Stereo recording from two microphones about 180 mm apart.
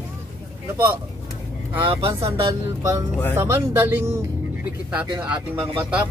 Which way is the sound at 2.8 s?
15° right (ahead or behind).